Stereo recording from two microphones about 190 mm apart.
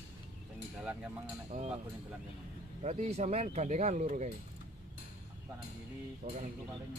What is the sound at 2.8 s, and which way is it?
Speech, 35° right (ahead or behind).